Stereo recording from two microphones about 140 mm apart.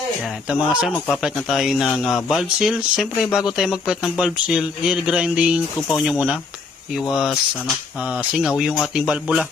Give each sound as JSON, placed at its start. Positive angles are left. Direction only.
{"t": 0.3, "sound": "speech", "side_deg": -5}